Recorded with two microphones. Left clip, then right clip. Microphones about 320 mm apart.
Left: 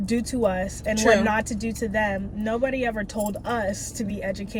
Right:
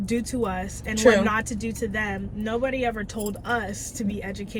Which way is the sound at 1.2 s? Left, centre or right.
Centre.